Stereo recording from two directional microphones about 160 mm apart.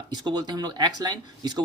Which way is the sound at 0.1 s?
25° right (ahead or behind).